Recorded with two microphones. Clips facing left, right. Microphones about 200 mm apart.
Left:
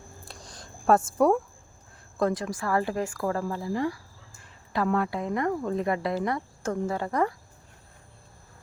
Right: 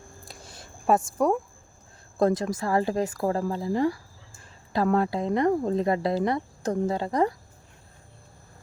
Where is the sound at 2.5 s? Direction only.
25° right (ahead or behind).